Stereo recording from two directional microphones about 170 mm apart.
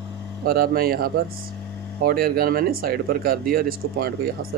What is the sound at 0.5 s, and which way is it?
Speech, 65° right (ahead or behind).